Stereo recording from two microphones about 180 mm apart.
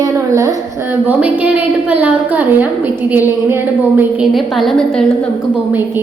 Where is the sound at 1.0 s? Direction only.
10° right (ahead or behind).